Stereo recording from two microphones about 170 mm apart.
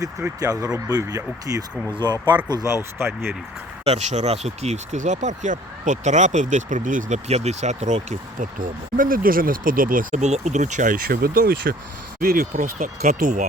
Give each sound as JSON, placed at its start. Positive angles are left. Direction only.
{"t": 0.0, "sound": "speech", "side_deg": -15}
{"t": 3.8, "sound": "speech", "side_deg": -40}